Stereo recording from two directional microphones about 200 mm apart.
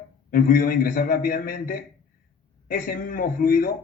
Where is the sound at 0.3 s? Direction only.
45° left (ahead or behind).